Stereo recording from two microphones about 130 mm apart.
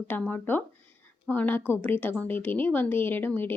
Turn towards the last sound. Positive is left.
turn(degrees=15)  # may be behind; listen again after turning